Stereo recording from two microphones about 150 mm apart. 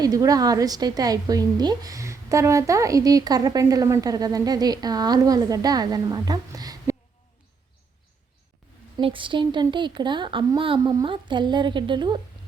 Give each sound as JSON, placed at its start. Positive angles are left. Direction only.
{"t": 0.0, "sound": "a woman's voice", "side_deg": -25}
{"t": 9.0, "sound": "a woman's voice", "side_deg": -35}